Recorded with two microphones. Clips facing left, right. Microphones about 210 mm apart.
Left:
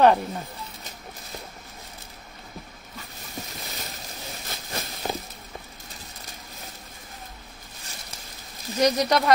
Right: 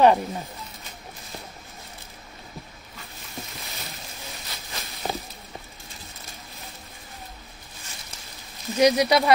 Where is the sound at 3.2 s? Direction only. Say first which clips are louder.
Left 1 dB; 40° left (ahead or behind).